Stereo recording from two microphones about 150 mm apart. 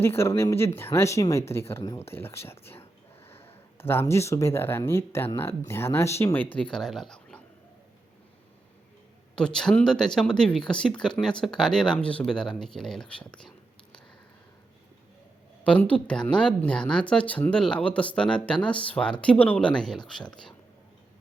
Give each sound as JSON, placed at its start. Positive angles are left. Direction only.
{"t": 0.2, "sound": "speech", "side_deg": 15}
{"t": 9.3, "sound": "speech", "side_deg": 5}
{"t": 15.6, "sound": "speech", "side_deg": 10}